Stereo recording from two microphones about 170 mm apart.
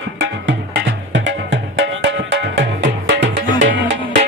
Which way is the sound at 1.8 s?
90° right.